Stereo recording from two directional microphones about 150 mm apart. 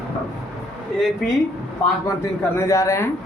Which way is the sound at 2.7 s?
20° left (ahead or behind).